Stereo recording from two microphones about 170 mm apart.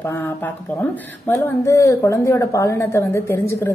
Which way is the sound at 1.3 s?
15° left (ahead or behind).